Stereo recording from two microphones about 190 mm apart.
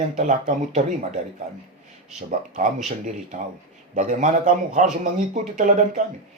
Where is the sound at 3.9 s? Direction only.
40° right (ahead or behind).